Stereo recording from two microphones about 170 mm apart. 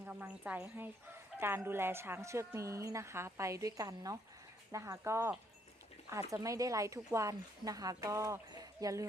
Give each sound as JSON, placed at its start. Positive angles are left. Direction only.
{"t": 0.0, "sound": "a woman's voice", "side_deg": -10}